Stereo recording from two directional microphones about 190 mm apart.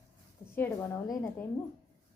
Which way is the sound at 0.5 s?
10° left (ahead or behind).